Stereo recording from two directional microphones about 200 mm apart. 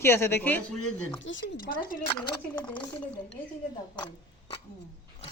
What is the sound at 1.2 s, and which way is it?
Speech, 65° left (ahead or behind).